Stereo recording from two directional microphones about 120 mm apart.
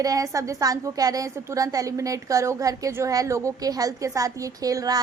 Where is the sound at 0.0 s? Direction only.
30° right (ahead or behind).